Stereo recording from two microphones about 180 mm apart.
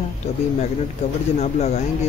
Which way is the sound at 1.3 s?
35° left (ahead or behind).